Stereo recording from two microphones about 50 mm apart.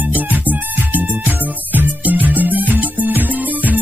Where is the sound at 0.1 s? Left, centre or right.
Right.